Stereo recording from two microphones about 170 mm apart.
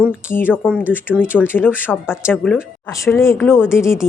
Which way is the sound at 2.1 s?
Centre (ahead or behind).